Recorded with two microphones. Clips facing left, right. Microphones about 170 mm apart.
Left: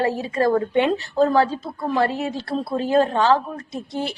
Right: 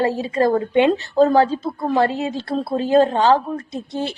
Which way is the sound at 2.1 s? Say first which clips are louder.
Right 2 dB; 20° right (ahead or behind).